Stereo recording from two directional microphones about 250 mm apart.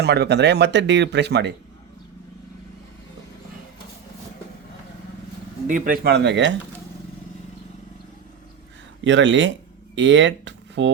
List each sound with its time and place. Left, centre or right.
0.0 s speech: right
5.6 s speech: right
9.0 s speech: right